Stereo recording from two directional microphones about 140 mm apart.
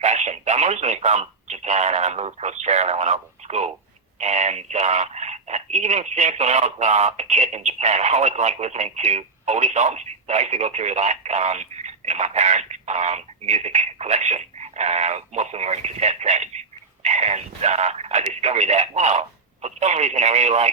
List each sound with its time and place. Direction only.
0.0 s speech: 55° right (ahead or behind)